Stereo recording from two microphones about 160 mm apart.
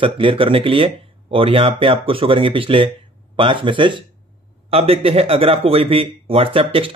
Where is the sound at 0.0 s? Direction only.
35° right (ahead or behind).